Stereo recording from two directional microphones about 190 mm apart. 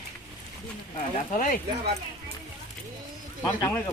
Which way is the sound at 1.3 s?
45° left (ahead or behind).